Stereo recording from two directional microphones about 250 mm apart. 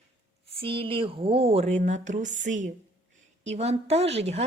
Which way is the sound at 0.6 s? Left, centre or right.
Right.